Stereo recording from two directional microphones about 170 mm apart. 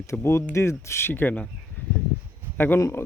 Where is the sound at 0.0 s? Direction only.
15° left (ahead or behind).